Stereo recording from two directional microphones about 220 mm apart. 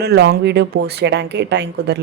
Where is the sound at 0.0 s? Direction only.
45° right (ahead or behind).